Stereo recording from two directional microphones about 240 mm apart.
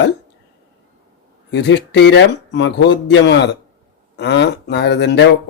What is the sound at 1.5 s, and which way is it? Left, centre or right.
Speech, left.